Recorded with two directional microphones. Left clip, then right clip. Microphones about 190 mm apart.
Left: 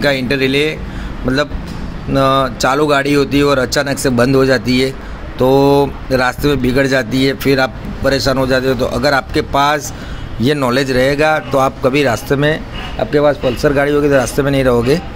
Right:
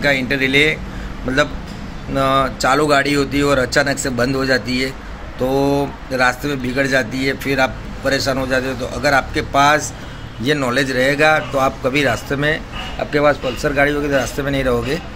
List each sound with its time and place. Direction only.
0.0 s a man's voice: 35° left (ahead or behind)
2.1 s a man's voice: 35° left (ahead or behind)